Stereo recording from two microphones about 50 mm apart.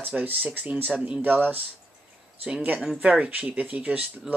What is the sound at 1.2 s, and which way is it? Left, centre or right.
Speech, right.